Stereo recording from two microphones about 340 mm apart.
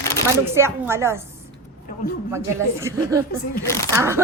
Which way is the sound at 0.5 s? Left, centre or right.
Centre.